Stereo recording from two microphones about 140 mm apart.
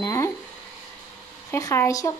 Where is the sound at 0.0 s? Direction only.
20° left (ahead or behind).